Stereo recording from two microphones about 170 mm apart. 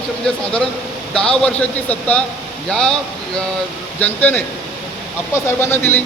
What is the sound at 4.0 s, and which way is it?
Speech, 10° left (ahead or behind).